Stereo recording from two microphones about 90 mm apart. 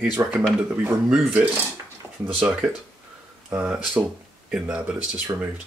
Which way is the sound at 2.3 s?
10° right (ahead or behind).